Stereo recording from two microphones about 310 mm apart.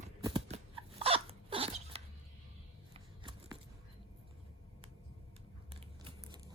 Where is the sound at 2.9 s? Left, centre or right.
Centre.